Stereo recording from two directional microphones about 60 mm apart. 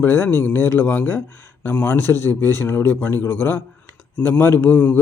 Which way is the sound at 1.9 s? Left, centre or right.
Left.